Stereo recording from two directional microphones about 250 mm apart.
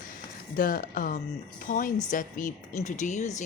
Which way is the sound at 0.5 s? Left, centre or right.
Left.